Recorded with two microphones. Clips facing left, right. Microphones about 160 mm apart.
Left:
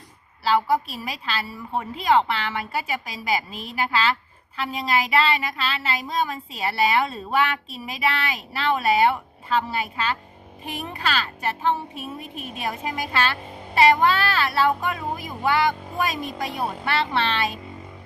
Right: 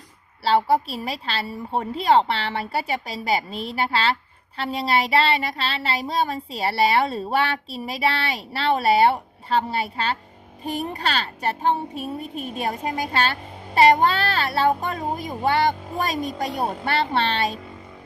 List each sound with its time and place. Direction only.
0.4 s speech: 30° right (ahead or behind)